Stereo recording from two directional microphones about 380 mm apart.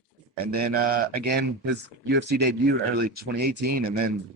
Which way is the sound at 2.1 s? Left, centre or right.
Right.